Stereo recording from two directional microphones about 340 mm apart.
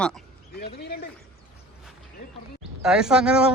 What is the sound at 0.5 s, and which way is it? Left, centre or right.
Speech, left.